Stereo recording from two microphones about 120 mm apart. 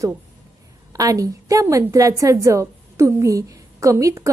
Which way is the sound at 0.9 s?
30° right (ahead or behind).